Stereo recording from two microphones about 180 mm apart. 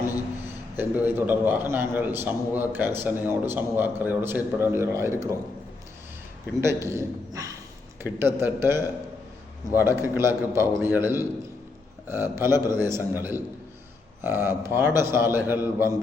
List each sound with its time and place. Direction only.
0.8 s a man's voice: 10° right (ahead or behind)
6.6 s a man's voice: 15° right (ahead or behind)